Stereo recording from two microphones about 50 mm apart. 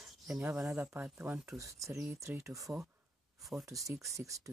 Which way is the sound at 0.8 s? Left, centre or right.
Right.